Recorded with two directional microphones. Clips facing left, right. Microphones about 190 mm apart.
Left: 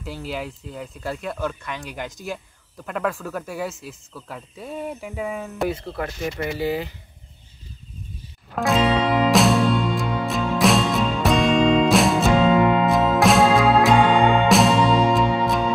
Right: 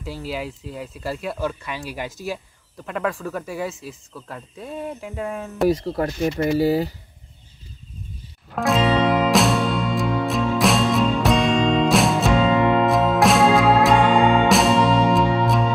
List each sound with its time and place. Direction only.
0.0 s speech: centre (ahead or behind)
5.7 s speech: 35° right (ahead or behind)
8.5 s music: centre (ahead or behind)